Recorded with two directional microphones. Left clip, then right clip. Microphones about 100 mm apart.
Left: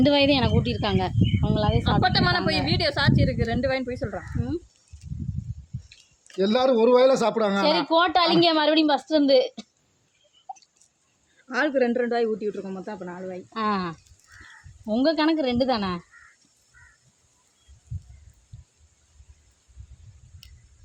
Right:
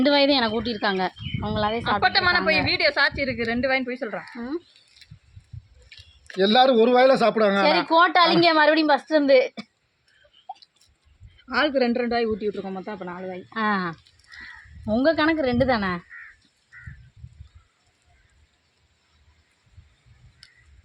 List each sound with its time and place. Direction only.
0.0 s speech: 10° left (ahead or behind)
6.4 s a man's voice: 40° left (ahead or behind)
7.6 s speech: 5° left (ahead or behind)
11.4 s speech: 15° right (ahead or behind)
13.5 s speech: 5° left (ahead or behind)
20.4 s a sound: centre (ahead or behind)